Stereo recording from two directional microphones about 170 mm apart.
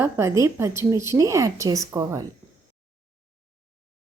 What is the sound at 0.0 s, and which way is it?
A woman's voice, 15° right (ahead or behind).